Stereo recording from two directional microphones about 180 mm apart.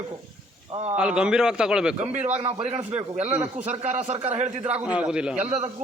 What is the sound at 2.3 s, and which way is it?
A man's voice, 35° right (ahead or behind).